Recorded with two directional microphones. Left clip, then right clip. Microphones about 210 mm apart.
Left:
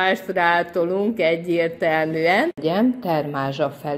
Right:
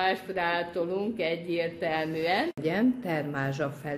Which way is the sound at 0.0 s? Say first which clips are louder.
Left 9 dB; 30° left (ahead or behind).